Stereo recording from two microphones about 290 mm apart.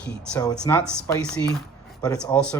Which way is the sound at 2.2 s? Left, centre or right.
Centre.